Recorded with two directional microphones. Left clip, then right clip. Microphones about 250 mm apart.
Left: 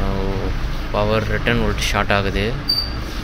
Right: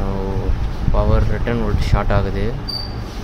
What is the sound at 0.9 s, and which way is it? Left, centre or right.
Speech, centre.